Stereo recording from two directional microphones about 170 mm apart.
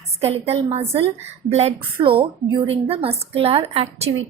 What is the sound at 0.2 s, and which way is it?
A woman's voice, 40° right (ahead or behind).